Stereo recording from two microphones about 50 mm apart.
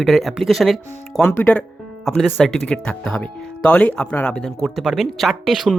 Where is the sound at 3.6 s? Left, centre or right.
Left.